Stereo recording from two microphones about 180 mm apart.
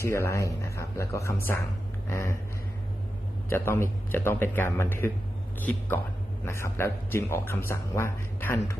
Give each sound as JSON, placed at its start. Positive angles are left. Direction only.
{"t": 0.0, "sound": "a man's voice", "side_deg": 15}
{"t": 2.0, "sound": "a sound", "side_deg": 15}
{"t": 3.5, "sound": "a man's voice", "side_deg": 15}